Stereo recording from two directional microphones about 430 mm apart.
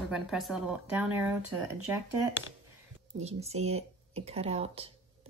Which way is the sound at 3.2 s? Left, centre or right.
Centre.